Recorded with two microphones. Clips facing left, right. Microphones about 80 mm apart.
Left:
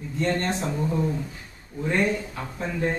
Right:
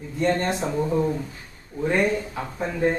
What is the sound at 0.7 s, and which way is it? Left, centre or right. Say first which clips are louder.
Speech: right 3 dB; centre.